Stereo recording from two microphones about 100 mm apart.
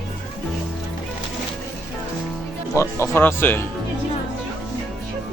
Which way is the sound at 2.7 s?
25° left (ahead or behind).